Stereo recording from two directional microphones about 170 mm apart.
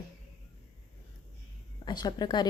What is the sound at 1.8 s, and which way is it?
Speech, 25° left (ahead or behind).